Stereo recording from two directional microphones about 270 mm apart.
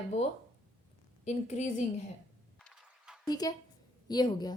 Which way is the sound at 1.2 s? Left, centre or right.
Left.